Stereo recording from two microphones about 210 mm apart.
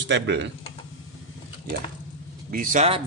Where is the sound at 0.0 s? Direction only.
55° right (ahead or behind).